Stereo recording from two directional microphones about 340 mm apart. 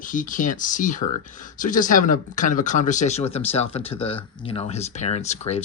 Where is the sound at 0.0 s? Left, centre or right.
Left.